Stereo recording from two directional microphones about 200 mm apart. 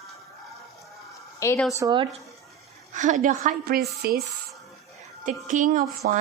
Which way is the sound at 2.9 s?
40° right (ahead or behind).